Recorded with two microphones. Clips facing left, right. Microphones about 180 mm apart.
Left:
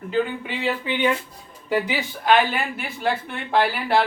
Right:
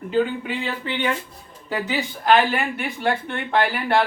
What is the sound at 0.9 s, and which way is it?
Speech, 10° left (ahead or behind).